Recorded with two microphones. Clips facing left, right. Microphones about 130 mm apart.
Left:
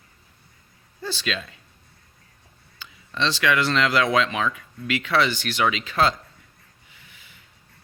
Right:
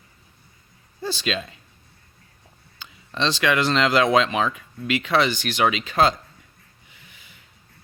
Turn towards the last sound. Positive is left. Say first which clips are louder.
# right 2 dB
turn(degrees=-20)  # may be behind; listen again after turning